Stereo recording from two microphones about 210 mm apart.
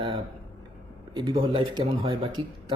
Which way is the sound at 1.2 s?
25° right (ahead or behind).